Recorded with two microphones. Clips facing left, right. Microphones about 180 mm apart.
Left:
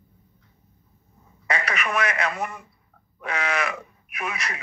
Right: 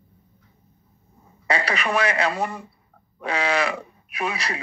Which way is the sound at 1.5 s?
30° right (ahead or behind).